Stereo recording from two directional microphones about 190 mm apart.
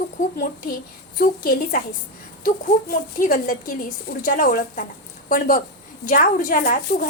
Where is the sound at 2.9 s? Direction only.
45° left (ahead or behind).